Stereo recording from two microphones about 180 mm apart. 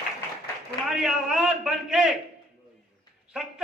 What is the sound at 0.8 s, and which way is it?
A man's voice, centre (ahead or behind).